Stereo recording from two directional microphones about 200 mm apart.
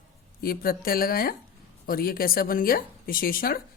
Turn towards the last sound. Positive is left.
turn(degrees=45)  # may be behind; listen again after turning